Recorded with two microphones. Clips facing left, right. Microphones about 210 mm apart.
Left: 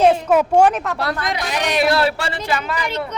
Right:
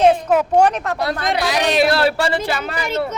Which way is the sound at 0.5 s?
5° left (ahead or behind).